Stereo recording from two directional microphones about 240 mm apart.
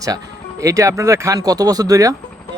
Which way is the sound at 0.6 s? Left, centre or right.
Centre.